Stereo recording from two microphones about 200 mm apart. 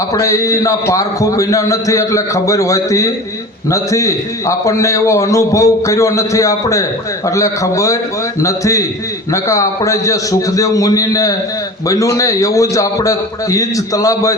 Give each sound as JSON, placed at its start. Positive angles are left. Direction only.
{"t": 0.1, "sound": "a man's voice", "side_deg": 15}